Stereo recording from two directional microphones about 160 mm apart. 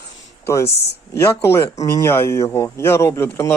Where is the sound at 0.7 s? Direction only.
90° left.